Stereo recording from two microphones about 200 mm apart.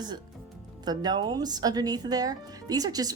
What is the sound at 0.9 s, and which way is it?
Speech, 20° right (ahead or behind).